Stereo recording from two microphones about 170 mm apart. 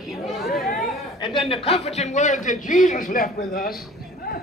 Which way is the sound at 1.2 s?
30° left (ahead or behind).